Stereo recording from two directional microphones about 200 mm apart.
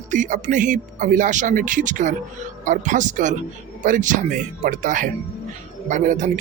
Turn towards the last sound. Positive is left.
turn(degrees=-40)  # may be behind; listen again after turning